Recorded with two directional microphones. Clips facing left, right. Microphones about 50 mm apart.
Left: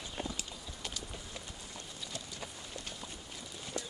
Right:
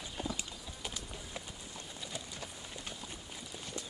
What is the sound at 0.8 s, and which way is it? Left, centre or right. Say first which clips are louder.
Clip-clop: even; centre.